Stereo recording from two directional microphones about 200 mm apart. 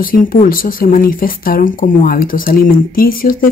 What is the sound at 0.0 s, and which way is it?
Speech, 45° left (ahead or behind).